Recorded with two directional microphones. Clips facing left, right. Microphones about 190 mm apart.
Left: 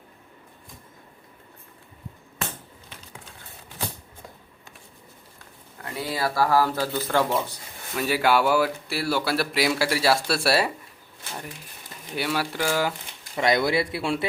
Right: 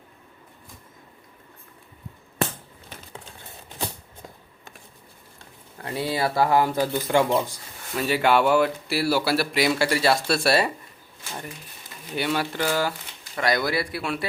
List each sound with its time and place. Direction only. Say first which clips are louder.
5.8 s speech: right 3 dB; 25° right (ahead or behind); by 8.0 s 10° right (ahead or behind)
8.0 s speech: right 1 dB; 10° left (ahead or behind)
12.1 s speech: right 1 dB; 5° left (ahead or behind)
13.3 s speech: left 2 dB; 20° left (ahead or behind)